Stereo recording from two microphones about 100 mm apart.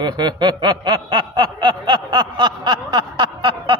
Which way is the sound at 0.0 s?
45° right (ahead or behind).